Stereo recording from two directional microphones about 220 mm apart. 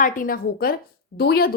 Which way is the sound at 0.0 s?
40° left (ahead or behind).